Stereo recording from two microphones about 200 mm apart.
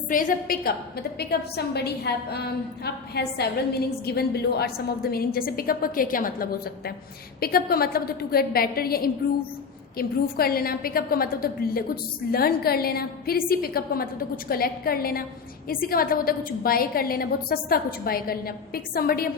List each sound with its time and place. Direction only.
0.1 s a woman's voice: 45° left (ahead or behind)